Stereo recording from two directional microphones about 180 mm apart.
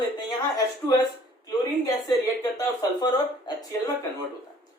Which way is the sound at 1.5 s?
20° left (ahead or behind).